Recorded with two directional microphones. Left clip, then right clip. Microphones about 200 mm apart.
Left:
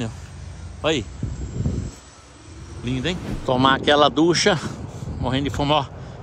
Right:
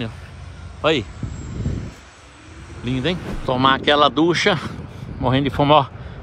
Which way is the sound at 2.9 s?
10° left (ahead or behind).